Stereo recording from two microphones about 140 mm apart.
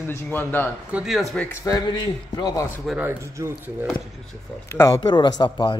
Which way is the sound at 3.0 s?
20° right (ahead or behind).